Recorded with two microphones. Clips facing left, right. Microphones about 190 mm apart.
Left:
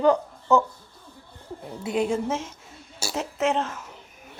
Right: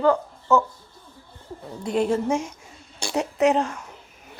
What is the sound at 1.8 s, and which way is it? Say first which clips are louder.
A woman's voice: right 2 dB; 5° left (ahead or behind).